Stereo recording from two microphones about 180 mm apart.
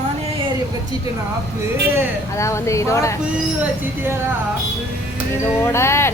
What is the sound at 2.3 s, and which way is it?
Speech, 15° left (ahead or behind).